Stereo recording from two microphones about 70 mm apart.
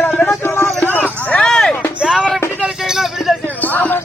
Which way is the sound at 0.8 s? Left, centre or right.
Left.